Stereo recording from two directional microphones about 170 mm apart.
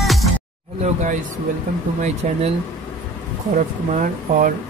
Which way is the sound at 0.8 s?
45° right (ahead or behind).